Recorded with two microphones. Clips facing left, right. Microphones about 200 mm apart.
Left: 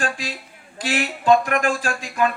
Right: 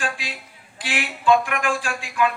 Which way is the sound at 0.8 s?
40° left (ahead or behind).